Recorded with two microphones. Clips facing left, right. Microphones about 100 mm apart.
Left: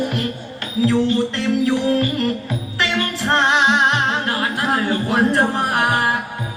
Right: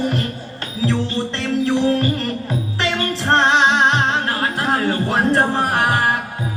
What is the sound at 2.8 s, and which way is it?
Music, 35° right (ahead or behind).